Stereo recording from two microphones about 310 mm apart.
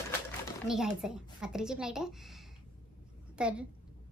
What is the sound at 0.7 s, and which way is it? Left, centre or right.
A woman's voice, centre.